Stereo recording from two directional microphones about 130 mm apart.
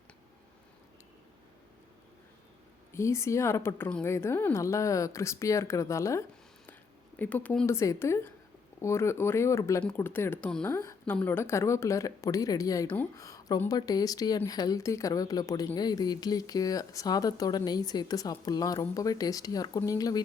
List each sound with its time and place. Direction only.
2.9 s speech: 20° left (ahead or behind)
7.7 s speech: 20° left (ahead or behind)